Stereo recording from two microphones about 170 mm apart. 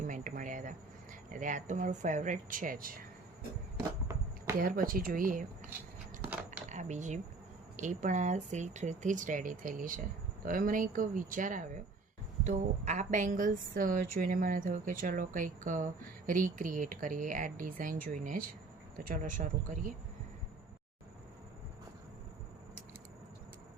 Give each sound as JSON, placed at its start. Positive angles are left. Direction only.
{"t": 0.1, "sound": "insect", "side_deg": -50}
{"t": 1.3, "sound": "a woman's voice", "side_deg": -50}
{"t": 4.5, "sound": "speech", "side_deg": -55}
{"t": 6.7, "sound": "a woman's voice", "side_deg": -45}